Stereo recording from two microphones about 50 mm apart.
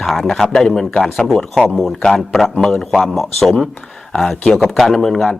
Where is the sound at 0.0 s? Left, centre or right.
Centre.